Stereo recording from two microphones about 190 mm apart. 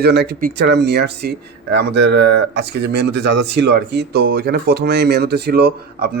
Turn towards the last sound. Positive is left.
turn(degrees=-55)  # may be behind; listen again after turning